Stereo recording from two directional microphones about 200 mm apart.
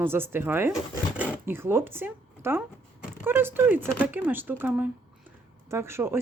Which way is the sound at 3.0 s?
10° right (ahead or behind).